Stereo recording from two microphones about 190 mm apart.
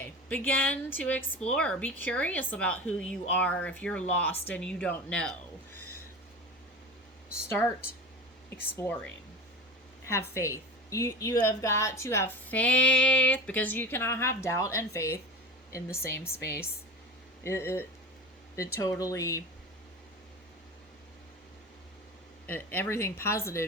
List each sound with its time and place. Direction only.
0.0 s a woman's voice: 10° left (ahead or behind)
8.4 s a woman's voice: 10° left (ahead or behind)
10.1 s a woman's voice: 15° left (ahead or behind)
22.4 s a woman's voice: 10° left (ahead or behind)